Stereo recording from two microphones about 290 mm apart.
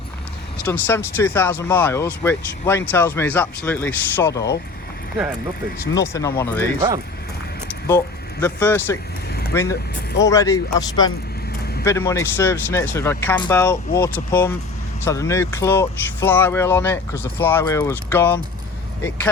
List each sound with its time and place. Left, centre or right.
0.6 s speech: centre
5.9 s speech: centre
6.7 s speech: centre
7.9 s speech: centre